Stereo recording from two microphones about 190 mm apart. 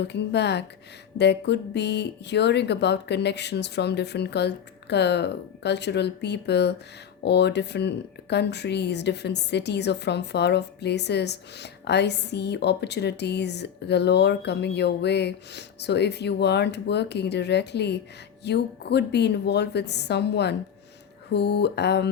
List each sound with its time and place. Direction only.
0.0 s speech: 60° left (ahead or behind)